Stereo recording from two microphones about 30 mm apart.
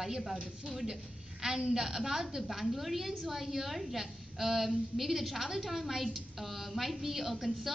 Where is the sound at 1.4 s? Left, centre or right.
Centre.